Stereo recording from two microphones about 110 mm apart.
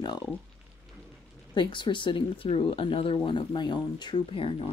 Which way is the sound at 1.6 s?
45° left (ahead or behind).